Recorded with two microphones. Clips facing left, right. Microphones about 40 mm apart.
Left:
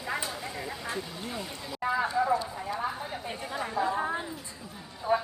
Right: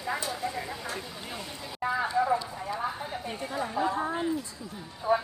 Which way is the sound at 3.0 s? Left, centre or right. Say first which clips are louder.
Right 1 dB; centre.